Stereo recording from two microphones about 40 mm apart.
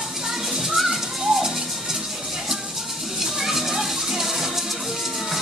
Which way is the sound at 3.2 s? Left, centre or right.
Centre.